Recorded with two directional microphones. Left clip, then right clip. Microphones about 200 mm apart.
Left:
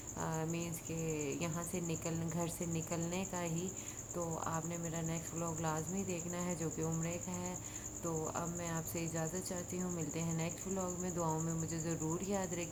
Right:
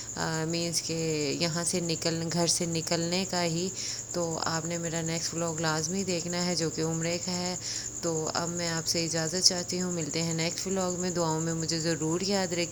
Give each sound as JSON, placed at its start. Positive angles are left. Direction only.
{"t": 0.2, "sound": "speech", "side_deg": -35}